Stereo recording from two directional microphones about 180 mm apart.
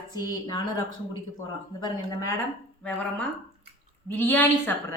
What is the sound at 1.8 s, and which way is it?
Speech, 15° left (ahead or behind).